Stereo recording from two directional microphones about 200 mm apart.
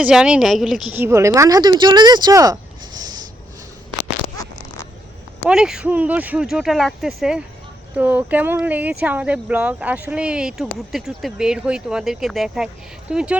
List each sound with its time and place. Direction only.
0.0 s speech: 5° right (ahead or behind)
0.9 s speech: 15° right (ahead or behind)
5.5 s speech: 5° right (ahead or behind)